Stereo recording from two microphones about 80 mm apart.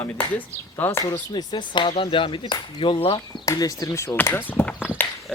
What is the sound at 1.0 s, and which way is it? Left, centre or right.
Speech, left.